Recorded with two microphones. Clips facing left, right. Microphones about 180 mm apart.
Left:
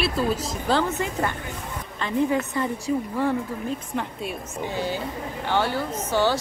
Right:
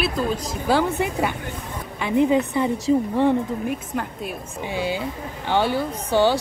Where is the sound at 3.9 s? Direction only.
Centre (ahead or behind).